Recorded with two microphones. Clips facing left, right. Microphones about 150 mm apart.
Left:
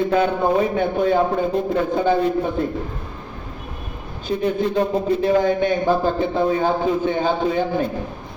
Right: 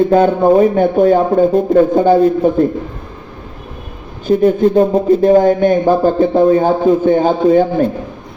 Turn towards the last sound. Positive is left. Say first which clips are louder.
# right 9 dB
turn(degrees=-45)  # may be behind; listen again after turning